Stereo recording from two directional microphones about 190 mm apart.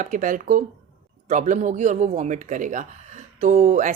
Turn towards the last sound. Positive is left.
turn(degrees=-40)  # may be behind; listen again after turning